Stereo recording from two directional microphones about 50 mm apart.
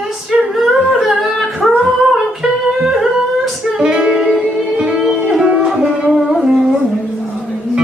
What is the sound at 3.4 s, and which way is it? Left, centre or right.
Music, centre.